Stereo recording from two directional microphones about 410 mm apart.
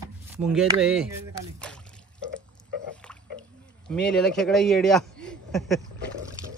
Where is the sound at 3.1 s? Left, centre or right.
Centre.